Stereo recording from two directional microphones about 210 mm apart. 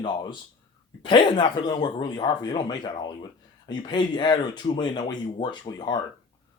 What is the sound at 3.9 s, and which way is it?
Speech, 20° left (ahead or behind).